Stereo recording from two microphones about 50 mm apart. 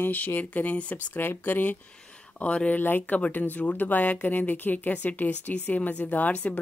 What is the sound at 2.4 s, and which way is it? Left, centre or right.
Speech, left.